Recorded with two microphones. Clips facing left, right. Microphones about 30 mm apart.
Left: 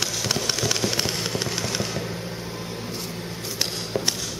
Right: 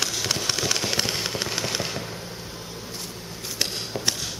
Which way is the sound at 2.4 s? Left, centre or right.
Left.